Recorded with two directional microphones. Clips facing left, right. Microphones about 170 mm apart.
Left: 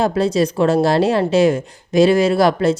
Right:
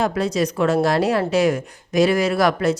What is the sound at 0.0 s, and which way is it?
A woman's voice, 30° left (ahead or behind).